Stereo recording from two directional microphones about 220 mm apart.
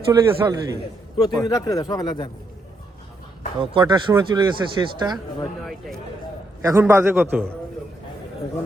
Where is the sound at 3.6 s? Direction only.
20° right (ahead or behind).